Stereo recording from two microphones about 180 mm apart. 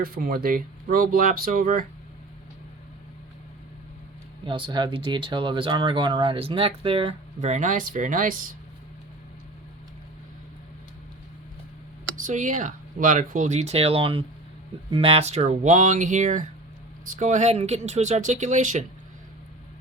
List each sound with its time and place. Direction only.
0.0 s speech: 55° right (ahead or behind)
4.4 s speech: 25° right (ahead or behind); by 8.4 s 45° right (ahead or behind)
12.1 s speech: 45° right (ahead or behind)